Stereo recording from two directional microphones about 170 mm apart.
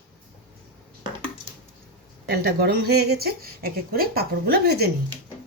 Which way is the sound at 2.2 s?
70° right (ahead or behind).